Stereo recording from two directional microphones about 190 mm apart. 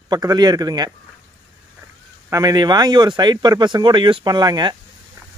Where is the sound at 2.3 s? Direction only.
20° right (ahead or behind).